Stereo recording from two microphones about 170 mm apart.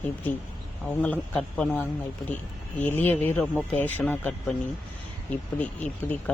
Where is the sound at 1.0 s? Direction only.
10° left (ahead or behind).